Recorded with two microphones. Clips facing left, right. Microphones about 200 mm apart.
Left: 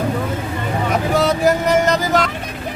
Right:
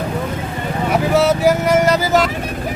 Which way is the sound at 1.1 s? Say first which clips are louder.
Right 2 dB; 5° right (ahead or behind).